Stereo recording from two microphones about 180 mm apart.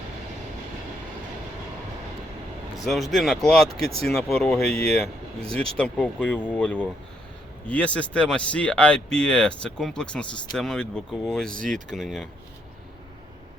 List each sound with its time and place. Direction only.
2.7 s speech: centre (ahead or behind)
11.5 s speech: 45° right (ahead or behind)
11.9 s speech: centre (ahead or behind)